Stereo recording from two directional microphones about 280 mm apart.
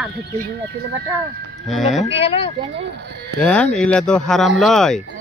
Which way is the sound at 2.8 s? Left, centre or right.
Right.